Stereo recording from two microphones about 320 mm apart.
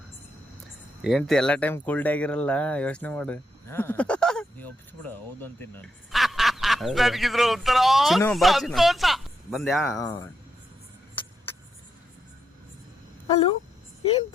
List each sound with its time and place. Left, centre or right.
1.0 s speech: centre
13.2 s speech: centre